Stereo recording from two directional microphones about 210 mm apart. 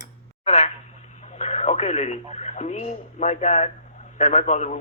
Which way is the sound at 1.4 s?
30° left (ahead or behind).